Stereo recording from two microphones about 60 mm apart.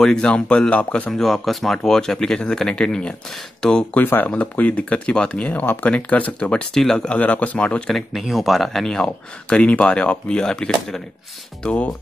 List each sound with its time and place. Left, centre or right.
0.0 s speech: centre
1.1 s speech: centre
3.9 s speech: left
6.7 s speech: centre
7.2 s speech: left
7.9 s speech: centre